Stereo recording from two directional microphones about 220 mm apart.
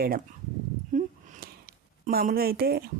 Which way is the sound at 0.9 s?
35° right (ahead or behind).